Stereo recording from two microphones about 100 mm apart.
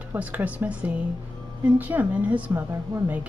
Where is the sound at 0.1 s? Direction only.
15° right (ahead or behind).